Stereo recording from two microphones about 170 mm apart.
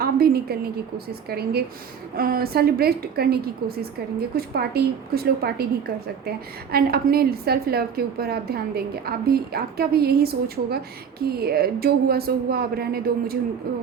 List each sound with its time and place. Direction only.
0.0 s a woman's voice: 65° right (ahead or behind)